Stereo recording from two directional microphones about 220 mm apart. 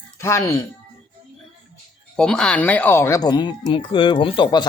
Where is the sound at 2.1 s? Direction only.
5° left (ahead or behind); by 4.6 s 20° left (ahead or behind).